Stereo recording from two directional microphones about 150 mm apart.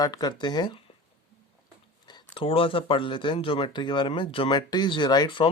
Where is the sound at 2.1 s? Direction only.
35° left (ahead or behind).